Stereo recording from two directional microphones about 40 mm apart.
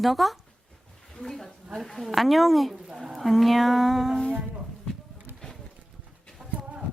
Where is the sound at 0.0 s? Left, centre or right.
Centre.